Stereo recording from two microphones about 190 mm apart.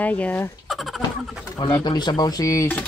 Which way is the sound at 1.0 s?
25° left (ahead or behind).